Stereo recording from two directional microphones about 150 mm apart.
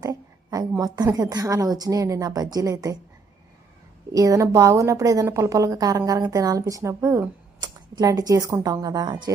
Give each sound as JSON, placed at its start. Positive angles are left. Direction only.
{"t": 0.0, "sound": "a woman's voice", "side_deg": -20}
{"t": 4.1, "sound": "a woman's voice", "side_deg": -20}